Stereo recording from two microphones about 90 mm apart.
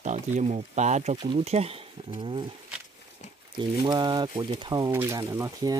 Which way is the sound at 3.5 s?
55° right (ahead or behind).